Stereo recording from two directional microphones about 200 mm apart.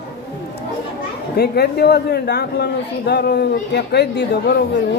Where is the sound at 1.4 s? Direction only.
55° left (ahead or behind).